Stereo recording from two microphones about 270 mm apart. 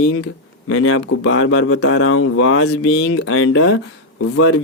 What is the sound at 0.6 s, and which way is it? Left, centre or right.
Speech, left.